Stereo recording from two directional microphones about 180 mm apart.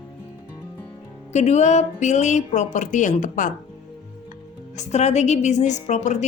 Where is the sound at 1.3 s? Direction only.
40° left (ahead or behind).